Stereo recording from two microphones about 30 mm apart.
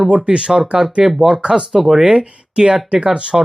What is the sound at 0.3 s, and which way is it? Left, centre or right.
Speech, right.